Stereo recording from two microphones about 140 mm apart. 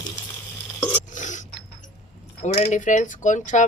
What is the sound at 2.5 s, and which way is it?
Speech, 55° left (ahead or behind).